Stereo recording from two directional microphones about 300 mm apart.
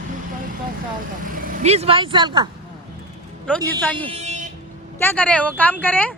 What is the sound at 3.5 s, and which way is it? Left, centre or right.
Speech, centre.